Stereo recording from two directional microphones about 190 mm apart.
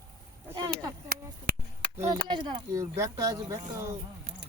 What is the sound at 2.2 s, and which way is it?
Speech, 25° right (ahead or behind).